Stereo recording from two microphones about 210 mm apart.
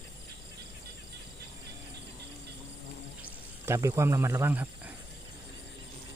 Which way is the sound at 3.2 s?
10° right (ahead or behind).